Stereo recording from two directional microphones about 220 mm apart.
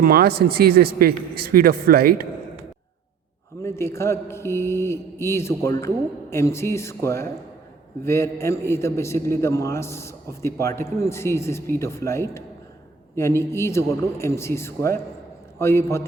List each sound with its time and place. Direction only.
0.0 s speech: 45° right (ahead or behind)
3.6 s a man's voice: 10° left (ahead or behind)